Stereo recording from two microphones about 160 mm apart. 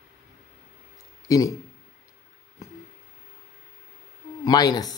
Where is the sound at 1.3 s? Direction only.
20° left (ahead or behind).